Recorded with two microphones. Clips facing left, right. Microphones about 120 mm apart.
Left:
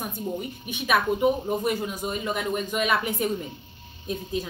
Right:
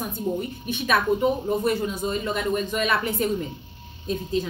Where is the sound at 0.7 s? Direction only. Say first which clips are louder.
Right 1 dB; 15° left (ahead or behind).